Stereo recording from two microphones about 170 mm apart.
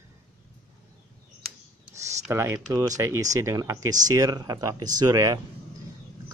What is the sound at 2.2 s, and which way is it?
Speech, 15° right (ahead or behind).